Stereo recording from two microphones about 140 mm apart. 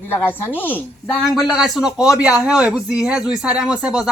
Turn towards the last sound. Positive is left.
turn(degrees=-5)  # may be behind; listen again after turning